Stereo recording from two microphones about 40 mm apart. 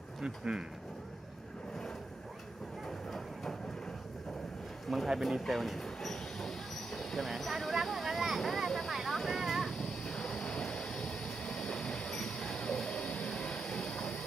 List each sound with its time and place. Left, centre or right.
0.2 s speech: centre
4.8 s speech: centre
5.8 s train: centre
7.2 s speech: centre
8.4 s vehicle: centre
8.9 s a sound: centre
9.8 s vehicle: centre
11.1 s train: left
13.3 s vehicle: centre